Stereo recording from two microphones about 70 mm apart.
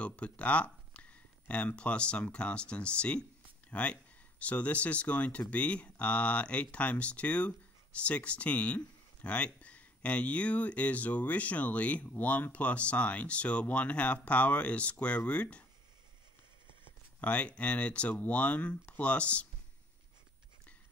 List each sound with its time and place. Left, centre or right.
0.0 s speech: centre
17.2 s speech: centre